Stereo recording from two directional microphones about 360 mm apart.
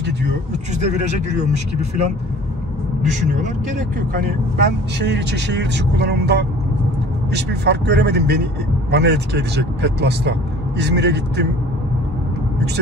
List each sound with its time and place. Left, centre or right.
4.1 s speech: right